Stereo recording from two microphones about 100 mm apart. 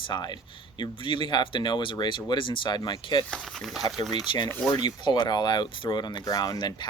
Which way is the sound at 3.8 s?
40° left (ahead or behind).